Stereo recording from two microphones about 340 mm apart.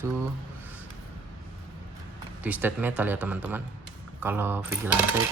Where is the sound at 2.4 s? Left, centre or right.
Centre.